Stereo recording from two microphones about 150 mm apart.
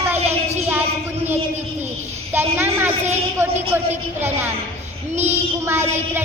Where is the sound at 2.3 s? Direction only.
15° right (ahead or behind).